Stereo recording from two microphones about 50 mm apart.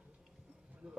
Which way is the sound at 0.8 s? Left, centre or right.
Right.